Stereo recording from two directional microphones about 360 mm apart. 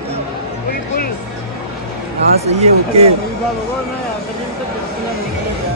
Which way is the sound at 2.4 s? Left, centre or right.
Centre.